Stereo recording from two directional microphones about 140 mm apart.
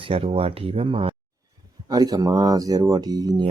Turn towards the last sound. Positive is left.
turn(degrees=-30)  # may be behind; listen again after turning